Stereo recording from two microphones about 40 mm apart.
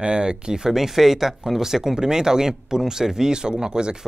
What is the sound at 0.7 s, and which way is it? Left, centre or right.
Speech, centre.